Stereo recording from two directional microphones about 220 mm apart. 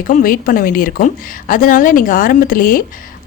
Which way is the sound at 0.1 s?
40° left (ahead or behind).